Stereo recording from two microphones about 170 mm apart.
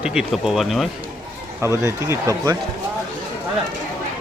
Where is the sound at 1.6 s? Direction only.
15° right (ahead or behind).